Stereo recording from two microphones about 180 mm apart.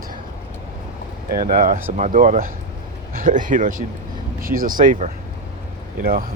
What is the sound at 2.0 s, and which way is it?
Speech, 45° right (ahead or behind).